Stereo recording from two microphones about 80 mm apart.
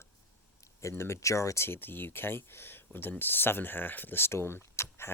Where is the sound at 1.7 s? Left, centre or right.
Left.